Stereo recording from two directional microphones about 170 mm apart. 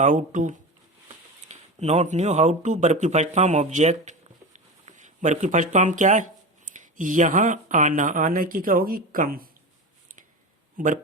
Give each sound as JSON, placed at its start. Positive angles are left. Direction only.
{"t": 0.0, "sound": "speech", "side_deg": -45}
{"t": 10.8, "sound": "speech", "side_deg": -50}